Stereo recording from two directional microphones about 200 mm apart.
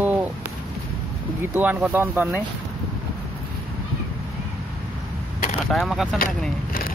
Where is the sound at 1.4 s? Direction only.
10° right (ahead or behind).